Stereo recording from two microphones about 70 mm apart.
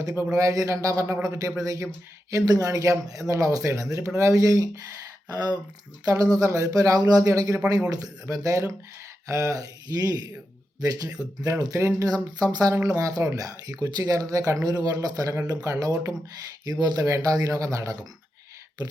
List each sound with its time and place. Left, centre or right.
0.2 s a man's voice: right
5.3 s speech: right
11.6 s a man's voice: right
12.0 s speech: right
13.0 s speech: right